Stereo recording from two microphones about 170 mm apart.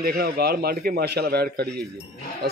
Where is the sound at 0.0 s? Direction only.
65° right (ahead or behind).